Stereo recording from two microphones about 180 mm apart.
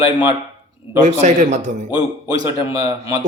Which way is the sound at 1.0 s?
40° right (ahead or behind).